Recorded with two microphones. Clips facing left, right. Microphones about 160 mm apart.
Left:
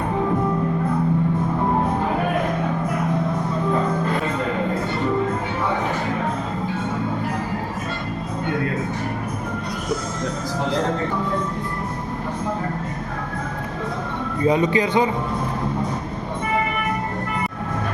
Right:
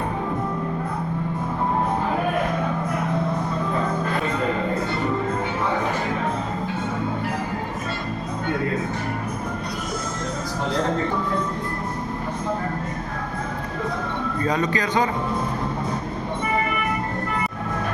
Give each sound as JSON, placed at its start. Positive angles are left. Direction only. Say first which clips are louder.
{"t": 14.4, "sound": "a man's voice", "louder": "left 6 dB", "side_deg": 20}